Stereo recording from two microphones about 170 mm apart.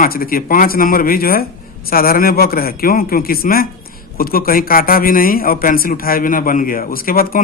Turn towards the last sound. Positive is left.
turn(degrees=60)  # may be behind; listen again after turning